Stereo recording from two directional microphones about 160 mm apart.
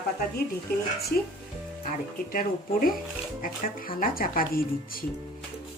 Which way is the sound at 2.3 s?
60° left (ahead or behind).